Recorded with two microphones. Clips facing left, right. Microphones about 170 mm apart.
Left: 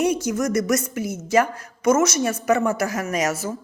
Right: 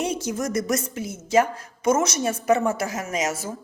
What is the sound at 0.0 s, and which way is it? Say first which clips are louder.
A woman's voice: left 5 dB; 25° right (ahead or behind).